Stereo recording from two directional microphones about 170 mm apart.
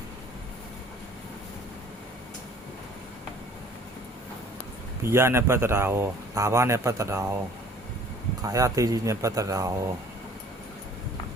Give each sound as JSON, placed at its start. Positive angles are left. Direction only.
{"t": 5.0, "sound": "speech", "side_deg": -15}
{"t": 8.4, "sound": "speech", "side_deg": -20}